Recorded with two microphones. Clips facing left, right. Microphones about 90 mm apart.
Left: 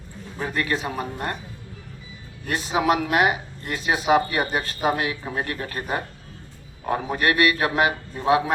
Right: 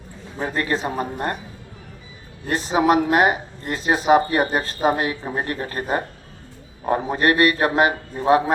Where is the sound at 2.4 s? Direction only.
35° right (ahead or behind).